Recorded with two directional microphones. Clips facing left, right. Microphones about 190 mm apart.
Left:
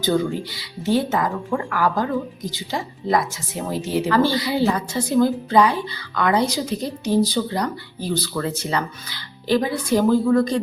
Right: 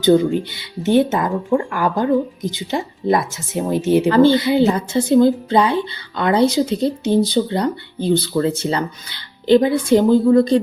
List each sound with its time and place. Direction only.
0.0 s speech: 20° right (ahead or behind)